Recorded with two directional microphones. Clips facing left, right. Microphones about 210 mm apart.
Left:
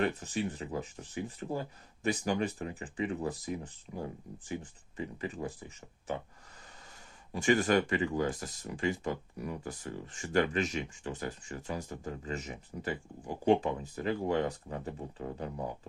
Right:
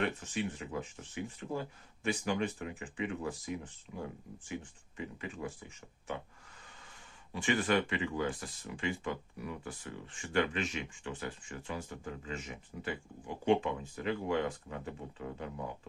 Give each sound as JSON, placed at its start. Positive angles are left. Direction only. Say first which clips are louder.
{"t": 0.0, "sound": "speech", "louder": "left 3 dB", "side_deg": 40}
{"t": 7.3, "sound": "speech", "louder": "left 4 dB", "side_deg": 45}